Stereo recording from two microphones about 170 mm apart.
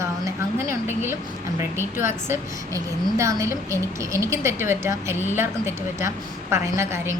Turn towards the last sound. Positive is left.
turn(degrees=-15)  # may be behind; listen again after turning